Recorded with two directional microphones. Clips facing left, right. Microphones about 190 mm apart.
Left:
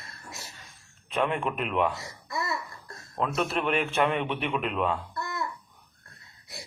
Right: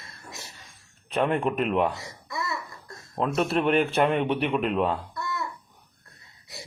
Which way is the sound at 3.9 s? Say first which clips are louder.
Right 3 dB; 35° right (ahead or behind).